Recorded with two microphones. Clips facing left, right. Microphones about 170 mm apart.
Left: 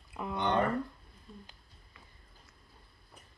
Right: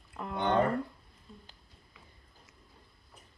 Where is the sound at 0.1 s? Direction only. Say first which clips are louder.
Left 1 dB; 5° left (ahead or behind).